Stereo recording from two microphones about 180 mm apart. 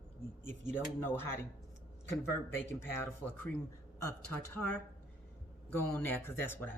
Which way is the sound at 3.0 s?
10° left (ahead or behind).